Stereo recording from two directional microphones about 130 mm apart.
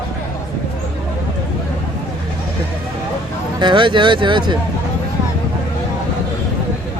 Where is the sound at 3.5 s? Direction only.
35° right (ahead or behind).